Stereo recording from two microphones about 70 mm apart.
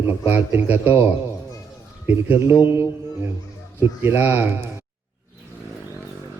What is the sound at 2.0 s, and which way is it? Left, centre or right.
Mantra, right.